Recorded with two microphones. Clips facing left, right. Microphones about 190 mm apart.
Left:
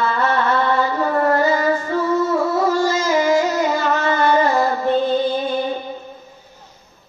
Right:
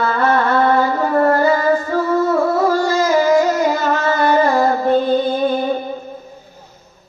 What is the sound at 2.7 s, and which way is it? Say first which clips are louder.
Music: right 3 dB; 45° right (ahead or behind).